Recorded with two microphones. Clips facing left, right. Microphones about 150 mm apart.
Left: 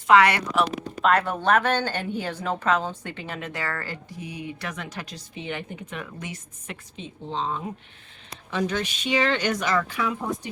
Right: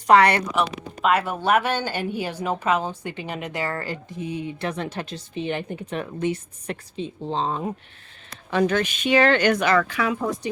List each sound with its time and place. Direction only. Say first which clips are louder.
0.1 s a woman's voice: right 2 dB; 35° right (ahead or behind)
0.5 s speech: even; 5° right (ahead or behind); by 7.6 s 40° right (ahead or behind)
8.4 s speech: right 5 dB; 60° right (ahead or behind); by 10.5 s 90° right